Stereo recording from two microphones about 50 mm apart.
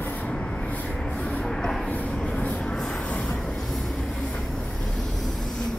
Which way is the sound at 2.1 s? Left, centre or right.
Left.